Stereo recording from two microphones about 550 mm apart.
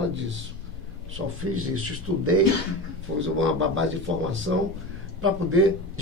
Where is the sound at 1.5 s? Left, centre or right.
Right.